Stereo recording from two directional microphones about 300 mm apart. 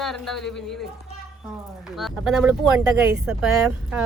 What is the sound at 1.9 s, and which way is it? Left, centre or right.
Speech, centre.